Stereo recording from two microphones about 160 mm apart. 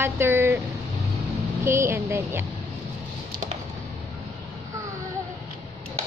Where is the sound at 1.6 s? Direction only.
15° right (ahead or behind).